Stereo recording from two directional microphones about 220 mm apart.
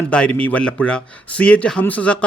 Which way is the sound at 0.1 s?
5° left (ahead or behind).